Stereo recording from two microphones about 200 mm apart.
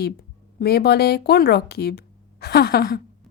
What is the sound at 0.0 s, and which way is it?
A woman's voice, 50° left (ahead or behind).